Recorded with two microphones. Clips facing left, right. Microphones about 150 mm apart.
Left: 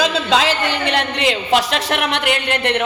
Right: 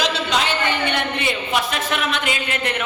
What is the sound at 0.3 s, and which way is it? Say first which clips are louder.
A woman's voice: left 4 dB; 90° left.